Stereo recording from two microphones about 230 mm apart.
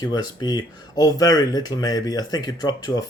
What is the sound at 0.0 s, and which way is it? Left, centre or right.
Speech, centre.